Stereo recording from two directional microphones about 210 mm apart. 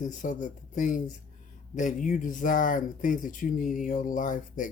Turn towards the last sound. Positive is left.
turn(degrees=40)  # may be behind; listen again after turning